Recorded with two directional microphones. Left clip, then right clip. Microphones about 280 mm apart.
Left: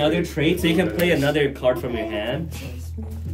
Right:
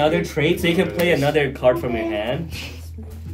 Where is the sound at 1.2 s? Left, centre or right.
Centre.